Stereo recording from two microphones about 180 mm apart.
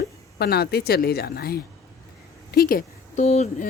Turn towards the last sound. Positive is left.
turn(degrees=35)  # may be behind; listen again after turning